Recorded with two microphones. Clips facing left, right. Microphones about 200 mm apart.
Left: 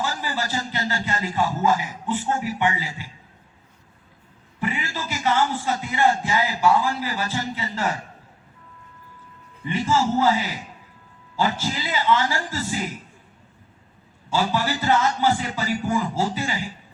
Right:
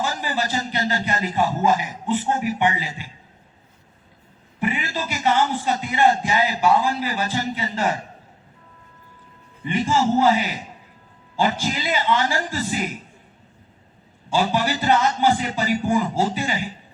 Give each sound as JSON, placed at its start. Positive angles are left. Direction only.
{"t": 0.0, "sound": "a man's voice", "side_deg": -20}
{"t": 4.6, "sound": "a man's voice", "side_deg": -20}
{"t": 9.6, "sound": "a man's voice", "side_deg": -15}
{"t": 14.3, "sound": "a man's voice", "side_deg": -20}